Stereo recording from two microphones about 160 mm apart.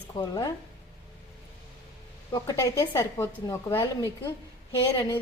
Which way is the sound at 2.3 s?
20° left (ahead or behind).